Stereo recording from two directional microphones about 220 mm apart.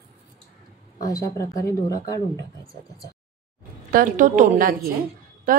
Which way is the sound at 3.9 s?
35° right (ahead or behind).